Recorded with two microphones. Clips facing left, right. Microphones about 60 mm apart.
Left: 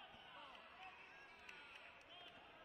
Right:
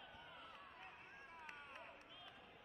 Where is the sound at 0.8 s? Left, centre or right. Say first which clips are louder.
Right 1 dB; right.